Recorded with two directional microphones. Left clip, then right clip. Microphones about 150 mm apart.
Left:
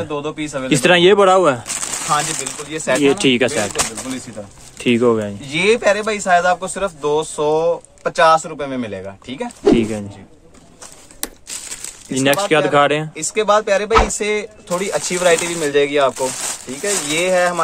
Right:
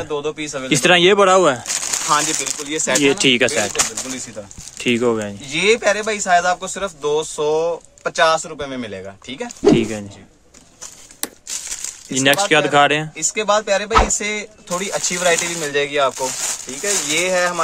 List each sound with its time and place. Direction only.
0.0 s speech: 5° right (ahead or behind)
2.7 s speech: 50° right (ahead or behind)
3.0 s speech: 25° right (ahead or behind)
3.6 s speech: centre (ahead or behind)
5.5 s speech: centre (ahead or behind)
11.1 s crumpling: centre (ahead or behind)
12.1 s speech: 20° right (ahead or behind)
13.1 s speech: 40° left (ahead or behind)
14.1 s speech: 30° left (ahead or behind)
15.3 s speech: centre (ahead or behind)
15.6 s speech: 30° left (ahead or behind)
16.1 s speech: centre (ahead or behind)